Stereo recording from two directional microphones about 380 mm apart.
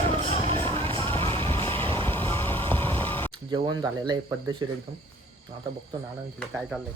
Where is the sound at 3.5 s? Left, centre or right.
Centre.